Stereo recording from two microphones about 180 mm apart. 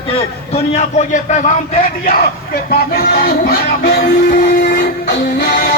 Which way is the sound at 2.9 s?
55° left (ahead or behind).